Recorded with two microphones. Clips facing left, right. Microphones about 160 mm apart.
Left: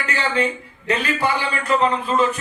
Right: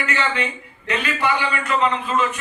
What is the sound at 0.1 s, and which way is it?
A man's voice, 35° left (ahead or behind).